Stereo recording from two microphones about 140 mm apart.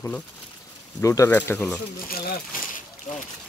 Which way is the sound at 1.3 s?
10° left (ahead or behind).